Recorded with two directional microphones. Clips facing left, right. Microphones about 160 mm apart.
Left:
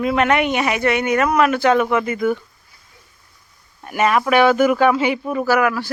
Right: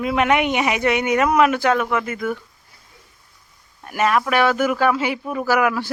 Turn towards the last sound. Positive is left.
turn(degrees=-10)  # may be behind; listen again after turning